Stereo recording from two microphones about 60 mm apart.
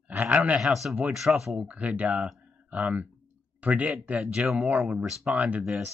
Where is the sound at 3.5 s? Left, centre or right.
Right.